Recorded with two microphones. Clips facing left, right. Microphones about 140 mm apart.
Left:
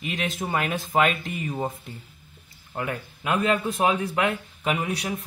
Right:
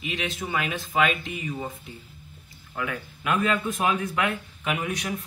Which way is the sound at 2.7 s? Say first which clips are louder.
Left 1 dB; 35° left (ahead or behind).